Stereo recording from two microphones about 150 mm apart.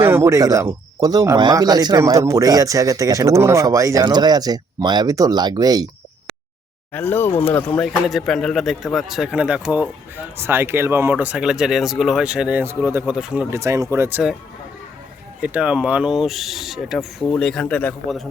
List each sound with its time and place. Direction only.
0.0 s speech: 15° right (ahead or behind)
6.9 s speech: 15° left (ahead or behind)
8.0 s speech: centre (ahead or behind)
15.4 s speech: 10° right (ahead or behind)